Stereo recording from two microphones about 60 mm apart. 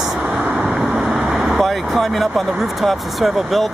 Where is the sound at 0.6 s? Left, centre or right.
Right.